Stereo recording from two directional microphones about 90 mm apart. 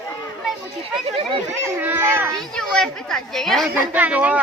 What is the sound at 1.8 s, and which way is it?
Speech, 20° right (ahead or behind).